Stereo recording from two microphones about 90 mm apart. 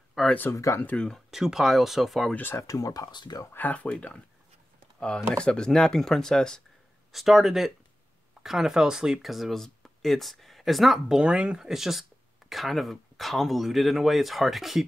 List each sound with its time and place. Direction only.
0.5 s speech: 35° left (ahead or behind)
0.8 s speech: 10° left (ahead or behind)
1.3 s speech: 5° right (ahead or behind)
2.3 s speech: 25° left (ahead or behind)
2.6 s speech: 40° left (ahead or behind)
3.1 s speech: 50° left (ahead or behind)
3.5 s speech: 15° left (ahead or behind); by 14.9 s centre (ahead or behind)